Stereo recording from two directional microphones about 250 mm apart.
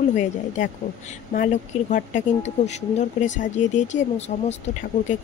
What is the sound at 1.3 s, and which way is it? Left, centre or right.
Speech, left.